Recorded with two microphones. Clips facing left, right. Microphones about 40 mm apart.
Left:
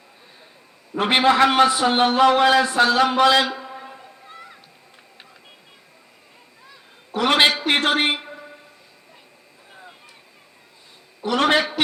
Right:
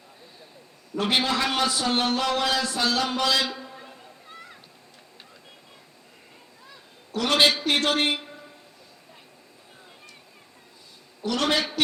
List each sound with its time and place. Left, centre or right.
0.9 s a man's voice: left
3.4 s a sound: left
4.3 s children playing: centre
7.1 s a man's voice: left
7.7 s a sound: left
11.2 s a man's voice: left